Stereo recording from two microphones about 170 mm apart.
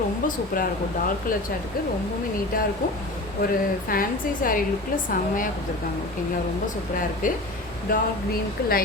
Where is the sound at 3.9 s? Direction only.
55° left (ahead or behind).